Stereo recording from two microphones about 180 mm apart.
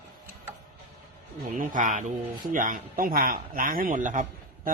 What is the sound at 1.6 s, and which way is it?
Speech, 45° right (ahead or behind).